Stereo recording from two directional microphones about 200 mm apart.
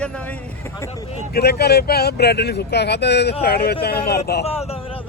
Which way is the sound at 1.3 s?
55° left (ahead or behind).